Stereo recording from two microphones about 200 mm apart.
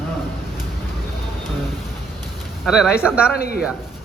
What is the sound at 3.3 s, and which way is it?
Speech, 50° left (ahead or behind).